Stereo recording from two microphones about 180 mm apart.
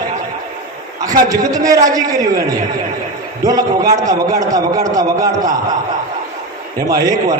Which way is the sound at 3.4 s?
20° right (ahead or behind).